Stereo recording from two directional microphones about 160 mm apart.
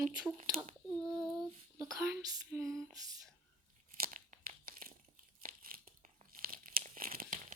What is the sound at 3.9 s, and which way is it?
Tearing, 60° right (ahead or behind).